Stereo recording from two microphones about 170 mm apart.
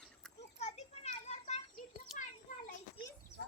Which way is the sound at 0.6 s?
40° left (ahead or behind).